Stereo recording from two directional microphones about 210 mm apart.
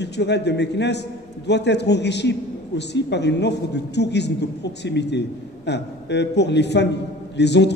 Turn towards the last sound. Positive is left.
turn(degrees=55)  # may be behind; listen again after turning